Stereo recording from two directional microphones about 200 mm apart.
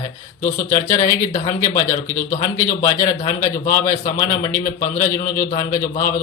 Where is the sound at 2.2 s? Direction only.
40° left (ahead or behind).